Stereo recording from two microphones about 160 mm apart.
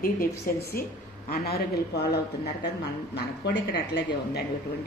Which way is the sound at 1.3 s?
80° left.